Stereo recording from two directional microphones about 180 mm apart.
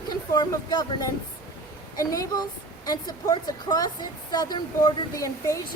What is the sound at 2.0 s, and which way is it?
Speech, 20° left (ahead or behind).